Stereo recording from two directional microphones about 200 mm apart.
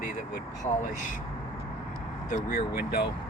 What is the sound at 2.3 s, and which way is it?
Speech, 45° left (ahead or behind).